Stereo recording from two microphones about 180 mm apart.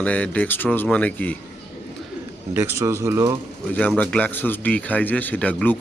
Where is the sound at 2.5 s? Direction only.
15° right (ahead or behind).